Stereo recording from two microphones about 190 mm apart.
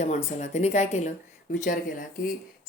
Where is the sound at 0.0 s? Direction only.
35° left (ahead or behind).